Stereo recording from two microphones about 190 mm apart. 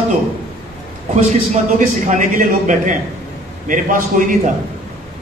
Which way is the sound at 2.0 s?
40° right (ahead or behind).